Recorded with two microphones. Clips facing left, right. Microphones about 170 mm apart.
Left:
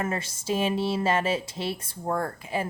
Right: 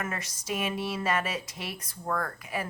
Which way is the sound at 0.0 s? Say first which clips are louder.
Left 6 dB; 30° left (ahead or behind).